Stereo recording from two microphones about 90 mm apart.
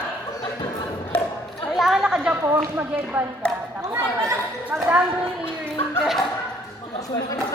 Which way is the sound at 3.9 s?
35° right (ahead or behind).